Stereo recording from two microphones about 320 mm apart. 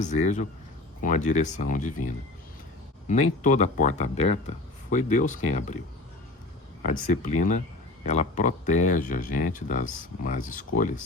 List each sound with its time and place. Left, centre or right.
0.0 s speech: left
3.4 s speech: left
6.8 s speech: left